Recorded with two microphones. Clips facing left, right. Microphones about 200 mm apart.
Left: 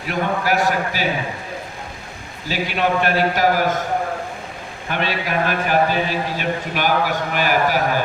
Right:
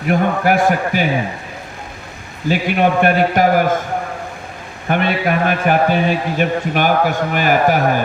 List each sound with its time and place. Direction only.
0.1 s a man's voice: 55° right (ahead or behind)
2.5 s a man's voice: 55° right (ahead or behind)
4.9 s a man's voice: 55° right (ahead or behind)